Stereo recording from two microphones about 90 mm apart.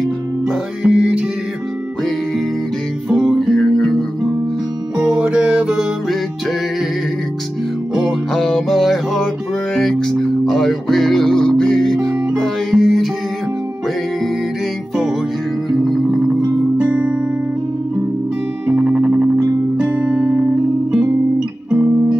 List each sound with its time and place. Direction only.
0.8 s music: 10° right (ahead or behind)
3.2 s music: centre (ahead or behind)
4.9 s music: 10° right (ahead or behind)
8.3 s music: 5° left (ahead or behind)
16.7 s music: 10° right (ahead or behind)
18.7 s music: 15° right (ahead or behind)